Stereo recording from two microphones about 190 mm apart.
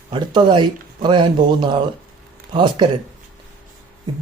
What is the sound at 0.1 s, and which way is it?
Speech, 25° right (ahead or behind).